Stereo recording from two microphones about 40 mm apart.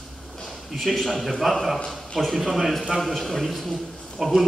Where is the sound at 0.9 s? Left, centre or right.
Centre.